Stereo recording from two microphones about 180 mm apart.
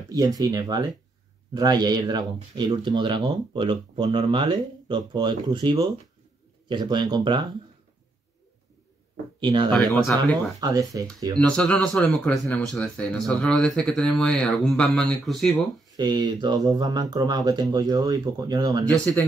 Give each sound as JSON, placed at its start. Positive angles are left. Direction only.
{"t": 0.1, "sound": "speech", "side_deg": -20}
{"t": 9.4, "sound": "speech", "side_deg": -25}
{"t": 9.7, "sound": "speech", "side_deg": 0}
{"t": 10.6, "sound": "speech", "side_deg": -20}
{"t": 11.3, "sound": "speech", "side_deg": 5}
{"t": 16.0, "sound": "speech", "side_deg": -25}
{"t": 18.9, "sound": "speech", "side_deg": 10}